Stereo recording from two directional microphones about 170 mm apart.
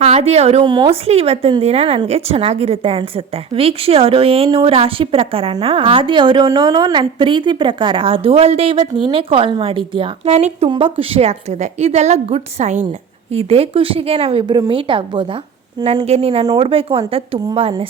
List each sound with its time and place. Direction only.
0.0 s a woman's voice: 40° right (ahead or behind)